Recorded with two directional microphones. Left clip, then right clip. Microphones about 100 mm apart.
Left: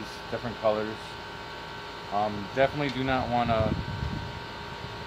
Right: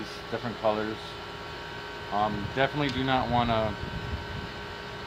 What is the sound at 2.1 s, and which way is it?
Speech, 10° left (ahead or behind).